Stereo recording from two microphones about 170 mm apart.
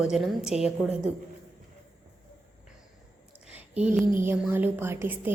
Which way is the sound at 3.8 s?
5° right (ahead or behind).